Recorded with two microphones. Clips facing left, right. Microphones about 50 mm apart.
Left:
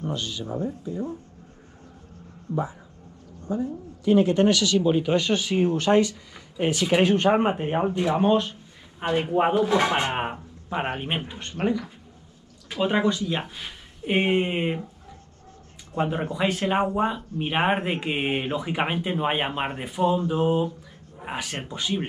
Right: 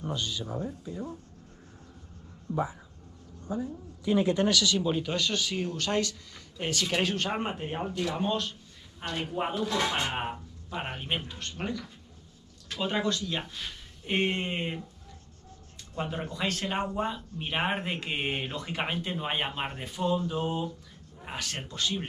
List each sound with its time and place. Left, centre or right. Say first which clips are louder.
0.4 s speech: left 5 dB; centre
4.4 s speech: left 6 dB; left
15.9 s speech: left 8 dB; left